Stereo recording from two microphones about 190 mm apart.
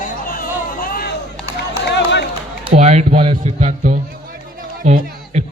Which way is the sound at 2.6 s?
35° right (ahead or behind).